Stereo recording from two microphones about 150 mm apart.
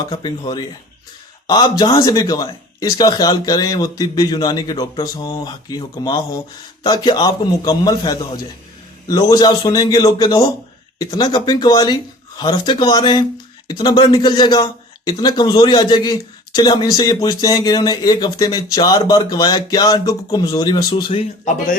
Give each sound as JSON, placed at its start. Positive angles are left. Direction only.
{"t": 0.0, "sound": "speech", "side_deg": 30}